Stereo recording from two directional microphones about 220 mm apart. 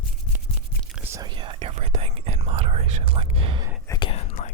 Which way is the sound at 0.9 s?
10° right (ahead or behind).